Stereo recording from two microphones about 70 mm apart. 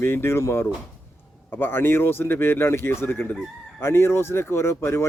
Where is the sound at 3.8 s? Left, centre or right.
Left.